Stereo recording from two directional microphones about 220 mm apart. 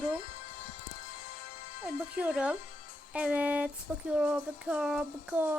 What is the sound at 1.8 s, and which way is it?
Speech, 5° right (ahead or behind).